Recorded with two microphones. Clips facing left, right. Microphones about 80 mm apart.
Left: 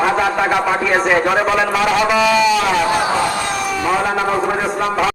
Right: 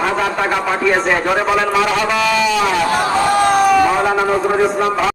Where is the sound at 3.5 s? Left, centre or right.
Right.